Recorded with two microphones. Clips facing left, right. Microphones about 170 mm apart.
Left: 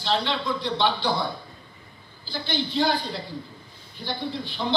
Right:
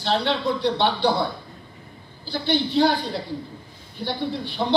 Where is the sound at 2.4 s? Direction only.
65° right (ahead or behind).